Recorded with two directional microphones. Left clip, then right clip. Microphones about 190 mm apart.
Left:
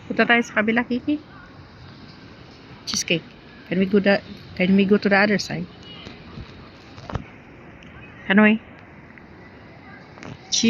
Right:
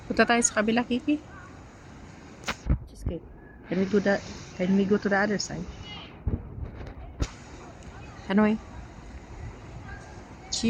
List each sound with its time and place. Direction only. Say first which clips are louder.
0.1 s a woman's voice: left 4 dB; 10° right (ahead or behind)
2.8 s a sound: left 17 dB; 5° left (ahead or behind)
3.7 s a woman's voice: left 6 dB; 10° left (ahead or behind)
5.0 s speech: left 7 dB; 20° left (ahead or behind)
8.3 s a woman's voice: left 8 dB; 5° right (ahead or behind)